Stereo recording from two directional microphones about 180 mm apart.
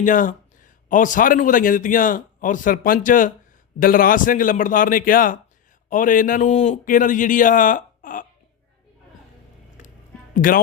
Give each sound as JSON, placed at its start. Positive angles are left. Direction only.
{"t": 0.0, "sound": "a man's voice", "side_deg": 45}
{"t": 10.3, "sound": "speech", "side_deg": 50}